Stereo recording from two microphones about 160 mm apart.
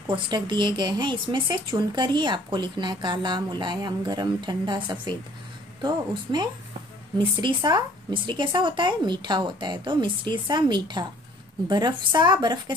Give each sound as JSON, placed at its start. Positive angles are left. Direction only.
{"t": 0.1, "sound": "speech", "side_deg": -30}